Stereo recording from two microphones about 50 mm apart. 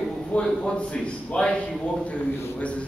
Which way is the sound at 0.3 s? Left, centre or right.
Left.